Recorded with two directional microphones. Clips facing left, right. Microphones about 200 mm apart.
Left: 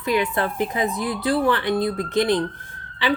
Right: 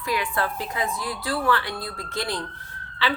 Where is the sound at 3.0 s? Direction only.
20° left (ahead or behind).